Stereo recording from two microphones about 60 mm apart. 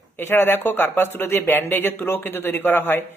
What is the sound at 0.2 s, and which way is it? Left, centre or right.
A man's voice, left.